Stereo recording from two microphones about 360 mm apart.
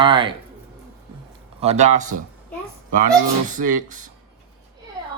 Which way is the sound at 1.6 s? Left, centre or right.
Centre.